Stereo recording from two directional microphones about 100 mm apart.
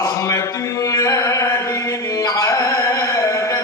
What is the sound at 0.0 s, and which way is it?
Mantra, 35° left (ahead or behind).